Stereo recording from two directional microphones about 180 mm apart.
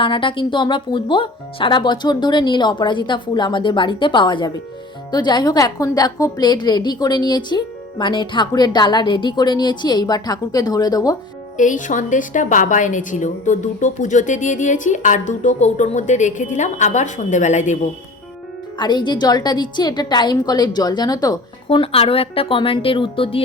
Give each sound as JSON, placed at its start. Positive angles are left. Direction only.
{"t": 0.0, "sound": "a woman's voice", "side_deg": 30}
{"t": 11.5, "sound": "a woman's voice", "side_deg": 45}
{"t": 18.8, "sound": "a woman's voice", "side_deg": 25}